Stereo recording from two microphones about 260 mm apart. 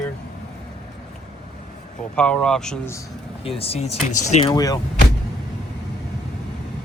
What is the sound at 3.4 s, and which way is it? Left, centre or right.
Speech, left.